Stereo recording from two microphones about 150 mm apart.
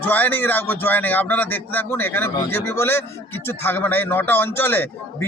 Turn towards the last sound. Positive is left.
turn(degrees=15)  # may be behind; listen again after turning